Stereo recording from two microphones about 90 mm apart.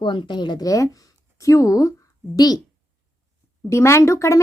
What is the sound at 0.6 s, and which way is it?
Speech, 40° left (ahead or behind).